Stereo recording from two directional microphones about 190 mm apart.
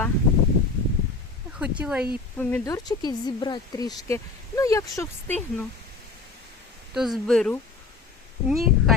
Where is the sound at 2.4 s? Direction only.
15° left (ahead or behind).